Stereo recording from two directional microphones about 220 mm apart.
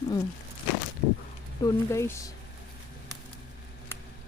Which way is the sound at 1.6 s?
15° left (ahead or behind).